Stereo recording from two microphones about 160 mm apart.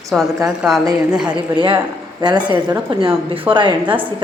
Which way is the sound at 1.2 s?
30° right (ahead or behind).